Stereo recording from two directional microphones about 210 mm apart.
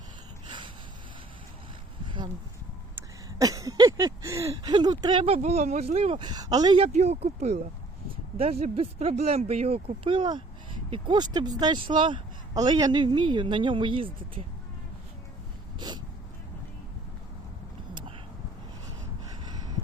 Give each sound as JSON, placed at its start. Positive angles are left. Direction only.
{"t": 2.0, "sound": "a sound", "side_deg": -20}
{"t": 3.3, "sound": "speech", "side_deg": -15}
{"t": 15.8, "sound": "dog", "side_deg": -20}